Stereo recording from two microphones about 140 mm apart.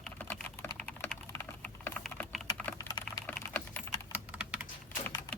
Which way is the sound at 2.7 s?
25° left (ahead or behind).